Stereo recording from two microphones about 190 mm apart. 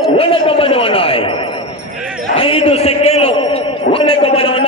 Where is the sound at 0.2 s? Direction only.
30° left (ahead or behind).